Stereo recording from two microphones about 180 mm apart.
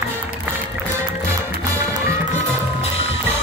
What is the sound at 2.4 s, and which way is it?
Music, 35° left (ahead or behind).